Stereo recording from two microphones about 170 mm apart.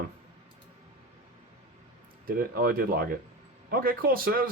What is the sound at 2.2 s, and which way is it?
Speech, 60° right (ahead or behind).